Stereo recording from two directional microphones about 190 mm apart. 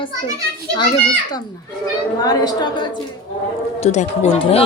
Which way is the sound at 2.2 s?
20° left (ahead or behind).